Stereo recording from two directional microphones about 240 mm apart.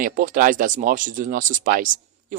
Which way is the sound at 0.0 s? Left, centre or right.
Right.